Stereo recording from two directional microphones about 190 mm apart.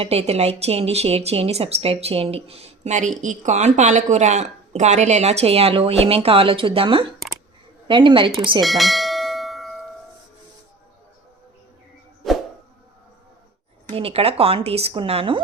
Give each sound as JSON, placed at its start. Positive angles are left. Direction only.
{"t": 0.0, "sound": "a woman's voice", "side_deg": -30}
{"t": 8.6, "sound": "bell", "side_deg": 0}
{"t": 12.2, "sound": "a sound", "side_deg": 0}
{"t": 13.9, "sound": "a woman's voice", "side_deg": -30}